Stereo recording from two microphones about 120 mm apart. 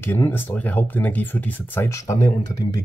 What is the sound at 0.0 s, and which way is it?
Speech, 20° left (ahead or behind).